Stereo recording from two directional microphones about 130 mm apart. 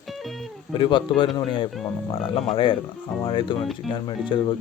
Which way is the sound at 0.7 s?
35° left (ahead or behind).